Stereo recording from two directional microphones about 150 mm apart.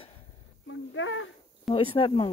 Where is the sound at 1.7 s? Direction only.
35° left (ahead or behind).